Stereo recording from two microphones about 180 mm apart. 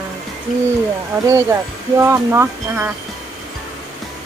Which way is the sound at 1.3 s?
15° right (ahead or behind).